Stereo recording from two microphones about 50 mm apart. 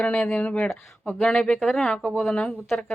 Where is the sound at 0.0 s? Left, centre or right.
Left.